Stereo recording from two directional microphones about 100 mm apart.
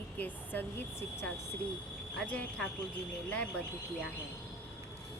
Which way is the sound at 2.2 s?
10° left (ahead or behind).